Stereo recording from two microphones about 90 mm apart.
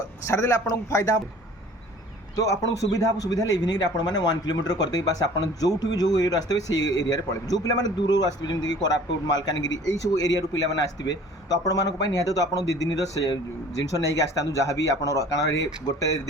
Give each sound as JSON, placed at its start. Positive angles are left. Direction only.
{"t": 0.3, "sound": "speech", "side_deg": 35}
{"t": 2.9, "sound": "a man's voice", "side_deg": 40}